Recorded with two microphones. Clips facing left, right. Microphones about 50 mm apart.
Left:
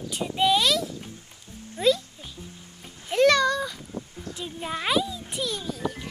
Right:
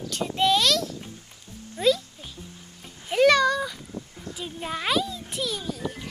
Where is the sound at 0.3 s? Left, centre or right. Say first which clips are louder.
Even; centre.